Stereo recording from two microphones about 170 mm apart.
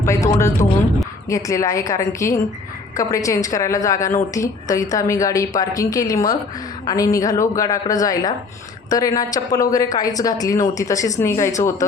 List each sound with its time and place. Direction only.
0.0 s a woman's voice: 15° left (ahead or behind)